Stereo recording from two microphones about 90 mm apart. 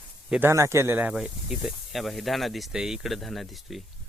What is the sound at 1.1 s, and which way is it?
Speech, 5° right (ahead or behind).